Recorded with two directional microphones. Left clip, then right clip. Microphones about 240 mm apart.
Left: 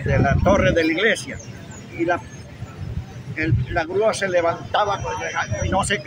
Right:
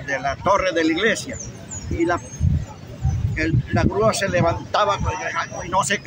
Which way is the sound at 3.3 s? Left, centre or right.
Centre.